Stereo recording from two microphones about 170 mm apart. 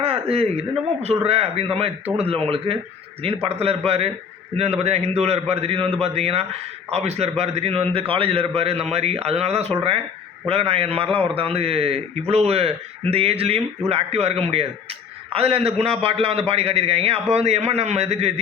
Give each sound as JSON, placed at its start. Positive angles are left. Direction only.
{"t": 0.0, "sound": "a man's voice", "side_deg": -35}